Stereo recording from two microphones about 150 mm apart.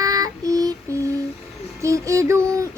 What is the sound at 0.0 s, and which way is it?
Child singing, 25° right (ahead or behind).